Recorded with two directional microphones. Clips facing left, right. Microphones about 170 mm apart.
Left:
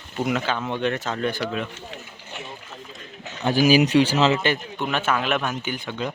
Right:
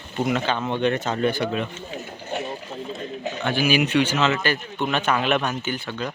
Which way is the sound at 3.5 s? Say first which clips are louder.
Left 4 dB; 35° left (ahead or behind).